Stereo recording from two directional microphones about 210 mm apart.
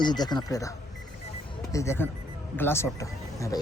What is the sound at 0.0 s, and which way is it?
Speech, 20° left (ahead or behind).